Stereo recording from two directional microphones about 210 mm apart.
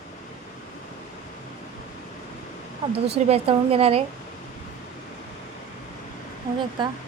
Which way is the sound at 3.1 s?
30° right (ahead or behind).